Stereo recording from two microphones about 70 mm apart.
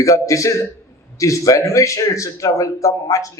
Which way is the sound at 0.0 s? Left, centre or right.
Left.